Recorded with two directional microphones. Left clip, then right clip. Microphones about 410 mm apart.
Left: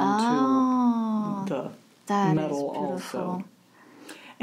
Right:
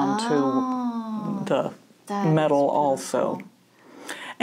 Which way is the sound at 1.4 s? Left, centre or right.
Right.